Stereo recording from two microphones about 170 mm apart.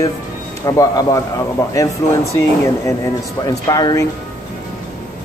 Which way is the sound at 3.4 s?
25° left (ahead or behind).